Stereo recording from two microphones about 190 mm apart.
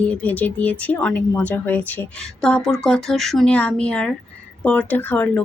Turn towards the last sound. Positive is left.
turn(degrees=10)  # may be behind; listen again after turning